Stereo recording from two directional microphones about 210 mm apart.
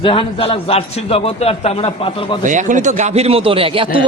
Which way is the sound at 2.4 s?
35° right (ahead or behind).